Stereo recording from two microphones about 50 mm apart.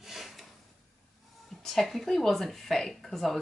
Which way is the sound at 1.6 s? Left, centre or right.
Centre.